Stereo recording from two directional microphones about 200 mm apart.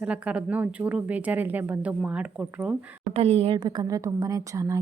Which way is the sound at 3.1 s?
30° right (ahead or behind).